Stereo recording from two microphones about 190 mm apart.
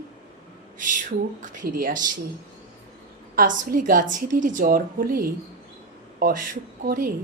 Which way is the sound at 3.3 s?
45° right (ahead or behind).